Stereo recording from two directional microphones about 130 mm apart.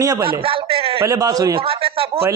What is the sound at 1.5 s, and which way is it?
Speech, 45° right (ahead or behind).